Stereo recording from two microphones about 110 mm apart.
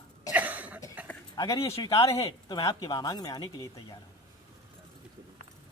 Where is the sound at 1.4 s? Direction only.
40° left (ahead or behind).